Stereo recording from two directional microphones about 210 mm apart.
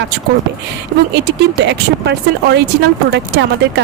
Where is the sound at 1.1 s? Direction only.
55° right (ahead or behind).